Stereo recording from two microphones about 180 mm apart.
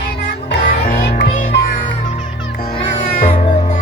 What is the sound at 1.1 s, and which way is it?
Music, 55° left (ahead or behind).